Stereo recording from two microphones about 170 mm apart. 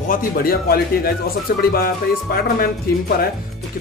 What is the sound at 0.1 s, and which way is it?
Speech, 60° left (ahead or behind).